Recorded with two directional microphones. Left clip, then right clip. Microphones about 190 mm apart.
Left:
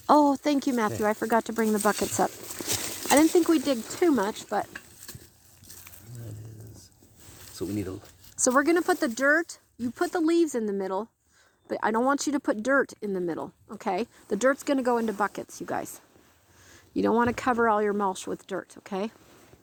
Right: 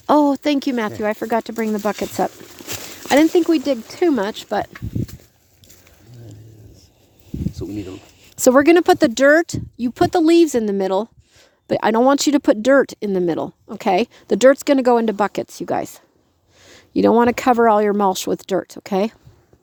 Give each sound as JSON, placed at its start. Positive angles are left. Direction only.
{"t": 0.0, "sound": "speech", "side_deg": -30}
{"t": 7.5, "sound": "a sound", "side_deg": 0}
{"t": 8.4, "sound": "speech", "side_deg": -50}